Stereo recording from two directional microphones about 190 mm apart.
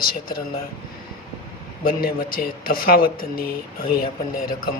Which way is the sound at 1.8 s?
50° left (ahead or behind).